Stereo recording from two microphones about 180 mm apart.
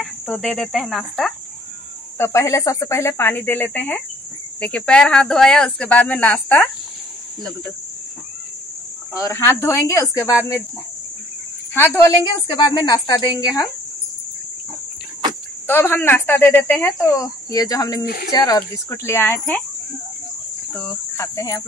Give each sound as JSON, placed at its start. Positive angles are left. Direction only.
{"t": 0.0, "sound": "cricket", "side_deg": 0}
{"t": 2.1, "sound": "speech", "side_deg": 15}
{"t": 9.1, "sound": "speech", "side_deg": 15}
{"t": 11.7, "sound": "speech", "side_deg": 15}
{"t": 12.4, "sound": "speech", "side_deg": 25}
{"t": 15.6, "sound": "speech", "side_deg": 10}
{"t": 18.0, "sound": "speech", "side_deg": 55}
{"t": 18.3, "sound": "speech", "side_deg": 20}
{"t": 20.9, "sound": "speech", "side_deg": 20}